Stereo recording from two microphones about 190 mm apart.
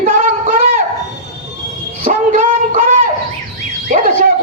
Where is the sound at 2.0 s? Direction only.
45° right (ahead or behind).